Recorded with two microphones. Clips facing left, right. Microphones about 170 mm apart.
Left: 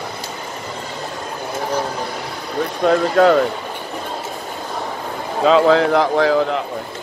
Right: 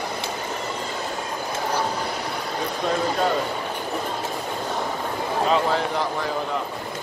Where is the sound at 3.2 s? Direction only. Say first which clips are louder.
Left 13 dB; 90° left.